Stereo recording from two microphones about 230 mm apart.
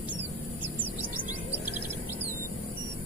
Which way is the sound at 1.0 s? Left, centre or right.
Centre.